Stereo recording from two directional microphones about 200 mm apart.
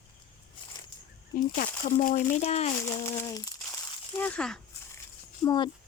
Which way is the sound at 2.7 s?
15° left (ahead or behind).